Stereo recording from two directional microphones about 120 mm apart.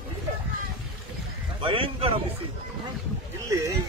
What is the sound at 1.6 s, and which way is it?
Speech, 50° right (ahead or behind).